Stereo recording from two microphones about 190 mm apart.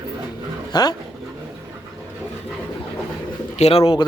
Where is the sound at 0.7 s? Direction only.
20° left (ahead or behind).